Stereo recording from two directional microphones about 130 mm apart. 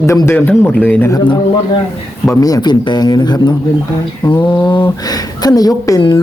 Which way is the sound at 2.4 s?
30° left (ahead or behind).